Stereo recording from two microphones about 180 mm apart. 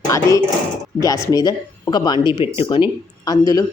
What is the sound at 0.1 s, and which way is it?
Speech, 20° left (ahead or behind).